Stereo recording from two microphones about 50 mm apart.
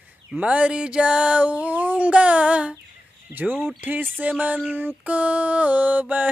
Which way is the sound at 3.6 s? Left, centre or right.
Right.